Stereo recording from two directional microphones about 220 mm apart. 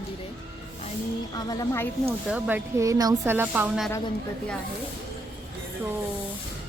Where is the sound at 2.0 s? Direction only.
5° right (ahead or behind).